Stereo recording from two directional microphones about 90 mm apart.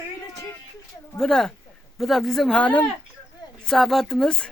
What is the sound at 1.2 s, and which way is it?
Speech, 5° left (ahead or behind).